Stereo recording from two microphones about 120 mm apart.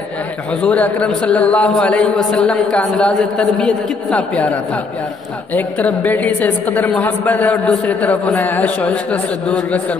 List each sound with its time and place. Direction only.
0.6 s a woman's voice: 10° left (ahead or behind)